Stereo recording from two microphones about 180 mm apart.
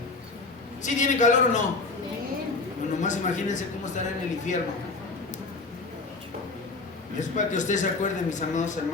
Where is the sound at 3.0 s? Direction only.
45° left (ahead or behind).